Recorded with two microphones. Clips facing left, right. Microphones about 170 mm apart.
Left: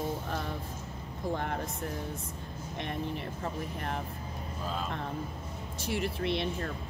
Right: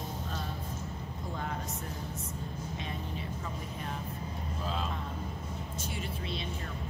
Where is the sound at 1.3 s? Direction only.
65° left (ahead or behind).